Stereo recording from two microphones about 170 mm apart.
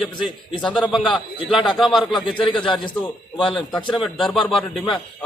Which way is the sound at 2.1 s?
30° left (ahead or behind).